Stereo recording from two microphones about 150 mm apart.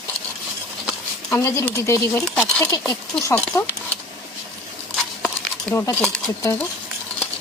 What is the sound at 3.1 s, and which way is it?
Speech, 5° left (ahead or behind).